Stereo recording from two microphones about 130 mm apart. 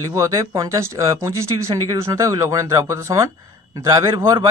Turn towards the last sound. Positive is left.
turn(degrees=-30)  # may be behind; listen again after turning